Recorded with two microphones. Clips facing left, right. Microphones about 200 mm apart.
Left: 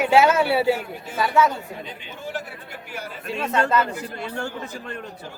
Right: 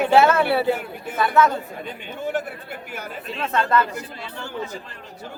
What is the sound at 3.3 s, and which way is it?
Speech, 10° left (ahead or behind).